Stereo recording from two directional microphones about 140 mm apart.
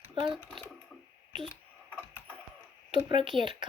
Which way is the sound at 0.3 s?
5° right (ahead or behind).